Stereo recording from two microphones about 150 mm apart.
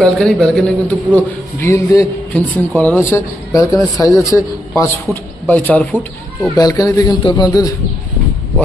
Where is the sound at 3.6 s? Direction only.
25° left (ahead or behind).